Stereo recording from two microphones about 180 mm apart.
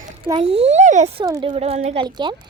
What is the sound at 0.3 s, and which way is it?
Speech, 30° right (ahead or behind).